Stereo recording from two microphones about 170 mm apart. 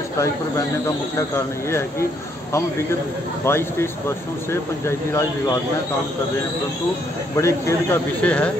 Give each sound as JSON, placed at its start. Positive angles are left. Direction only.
{"t": 0.2, "sound": "speech", "side_deg": 15}
{"t": 3.4, "sound": "speech", "side_deg": 15}
{"t": 7.3, "sound": "speech", "side_deg": 15}